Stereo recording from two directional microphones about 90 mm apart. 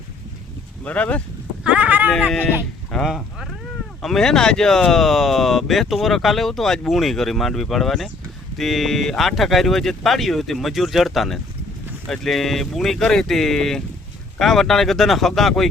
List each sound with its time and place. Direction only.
0.9 s speech: 15° left (ahead or behind)
1.6 s a sound: 10° right (ahead or behind)
2.9 s speech: 5° left (ahead or behind)